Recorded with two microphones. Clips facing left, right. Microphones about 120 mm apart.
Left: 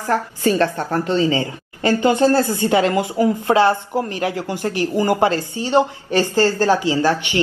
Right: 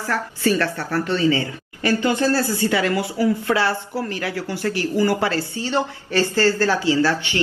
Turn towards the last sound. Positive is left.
turn(degrees=20)  # may be behind; listen again after turning